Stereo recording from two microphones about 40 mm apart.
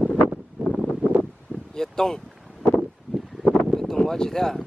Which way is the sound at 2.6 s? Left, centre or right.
Left.